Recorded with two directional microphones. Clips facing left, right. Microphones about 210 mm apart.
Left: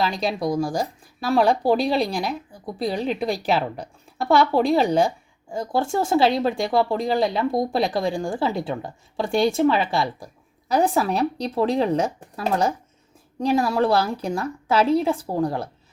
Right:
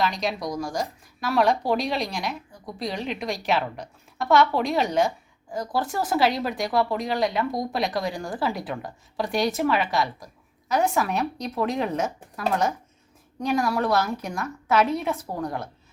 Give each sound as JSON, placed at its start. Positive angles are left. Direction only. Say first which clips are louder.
{"t": 0.0, "sound": "a woman's voice", "louder": "left 3 dB", "side_deg": 30}
{"t": 13.4, "sound": "a woman's voice", "louder": "left 4 dB", "side_deg": 30}